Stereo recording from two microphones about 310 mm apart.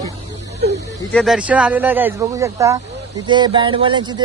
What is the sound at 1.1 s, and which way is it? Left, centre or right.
Speech, centre.